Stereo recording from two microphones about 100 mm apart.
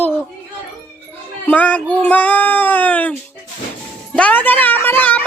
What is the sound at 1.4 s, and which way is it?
Speech, 15° left (ahead or behind).